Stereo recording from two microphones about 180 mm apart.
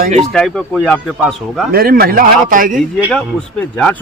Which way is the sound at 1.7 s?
55° right (ahead or behind).